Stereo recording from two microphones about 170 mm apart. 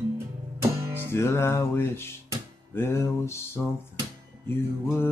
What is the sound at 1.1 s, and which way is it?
Music, 15° left (ahead or behind).